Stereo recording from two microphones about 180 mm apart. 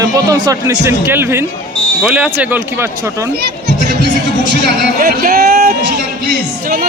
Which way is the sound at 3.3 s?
65° right (ahead or behind).